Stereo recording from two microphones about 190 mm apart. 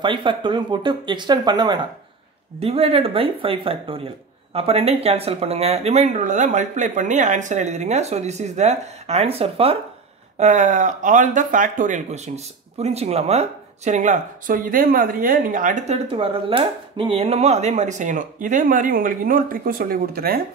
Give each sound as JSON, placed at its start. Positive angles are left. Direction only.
{"t": 0.0, "sound": "speech", "side_deg": -25}